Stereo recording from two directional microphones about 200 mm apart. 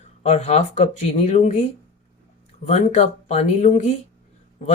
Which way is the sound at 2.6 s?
35° left (ahead or behind).